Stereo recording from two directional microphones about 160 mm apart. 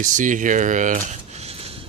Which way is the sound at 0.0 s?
55° right (ahead or behind).